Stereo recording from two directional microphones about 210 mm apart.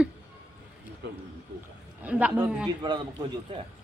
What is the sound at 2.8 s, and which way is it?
Speech, 20° right (ahead or behind).